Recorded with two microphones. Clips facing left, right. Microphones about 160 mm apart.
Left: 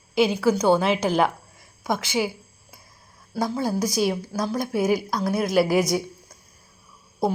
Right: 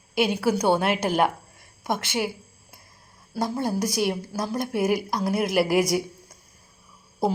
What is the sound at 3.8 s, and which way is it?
Speech, 60° right (ahead or behind).